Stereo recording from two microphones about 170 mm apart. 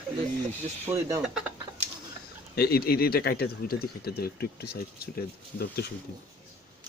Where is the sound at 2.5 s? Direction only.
65° left (ahead or behind).